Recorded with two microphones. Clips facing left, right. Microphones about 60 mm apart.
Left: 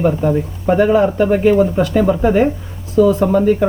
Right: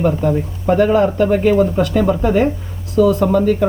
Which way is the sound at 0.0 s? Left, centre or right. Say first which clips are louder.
Left 1 dB; centre.